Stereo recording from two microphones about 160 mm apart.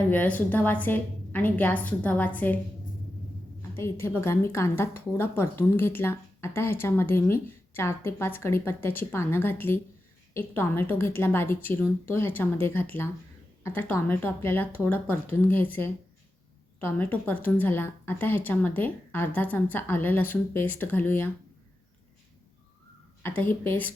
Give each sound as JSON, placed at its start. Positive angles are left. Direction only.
{"t": 0.1, "sound": "speech", "side_deg": 10}
{"t": 3.6, "sound": "speech", "side_deg": 15}
{"t": 23.4, "sound": "speech", "side_deg": 10}